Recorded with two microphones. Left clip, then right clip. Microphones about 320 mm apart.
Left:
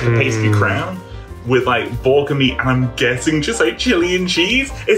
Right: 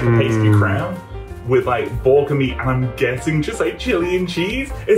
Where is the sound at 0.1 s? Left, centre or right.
Centre.